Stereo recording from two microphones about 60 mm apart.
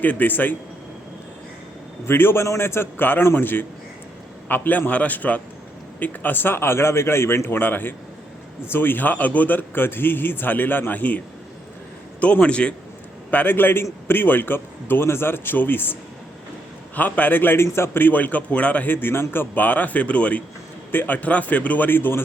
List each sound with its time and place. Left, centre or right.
0.0 s a man's voice: left
2.0 s a man's voice: left
12.2 s a man's voice: centre
13.3 s a man's voice: left